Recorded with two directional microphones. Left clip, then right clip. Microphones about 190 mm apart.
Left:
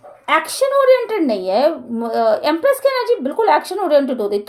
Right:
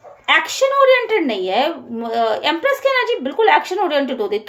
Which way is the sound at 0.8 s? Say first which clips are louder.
Even; 50° left (ahead or behind).